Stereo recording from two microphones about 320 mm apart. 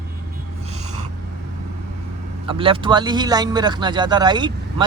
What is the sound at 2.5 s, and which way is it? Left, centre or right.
Speech, centre.